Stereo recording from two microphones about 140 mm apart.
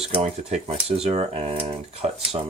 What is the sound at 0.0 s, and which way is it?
Speech, 50° right (ahead or behind).